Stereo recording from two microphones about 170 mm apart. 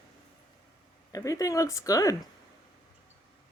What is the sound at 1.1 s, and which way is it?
Speech, 20° left (ahead or behind).